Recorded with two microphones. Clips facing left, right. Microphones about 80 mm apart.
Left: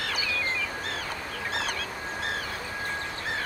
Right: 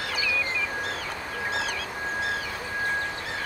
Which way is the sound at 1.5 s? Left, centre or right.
Left.